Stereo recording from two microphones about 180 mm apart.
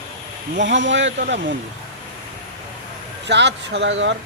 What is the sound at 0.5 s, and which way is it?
Speech, 90° right.